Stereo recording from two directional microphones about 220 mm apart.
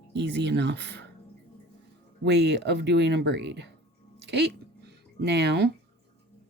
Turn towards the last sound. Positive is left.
turn(degrees=-50)  # may be behind; listen again after turning